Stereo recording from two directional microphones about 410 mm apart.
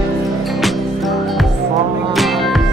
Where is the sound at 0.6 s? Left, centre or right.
Centre.